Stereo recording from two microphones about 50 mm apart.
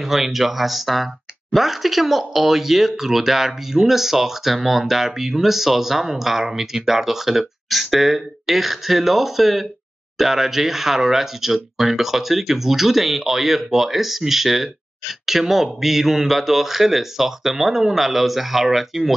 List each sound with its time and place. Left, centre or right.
0.0 s speech: centre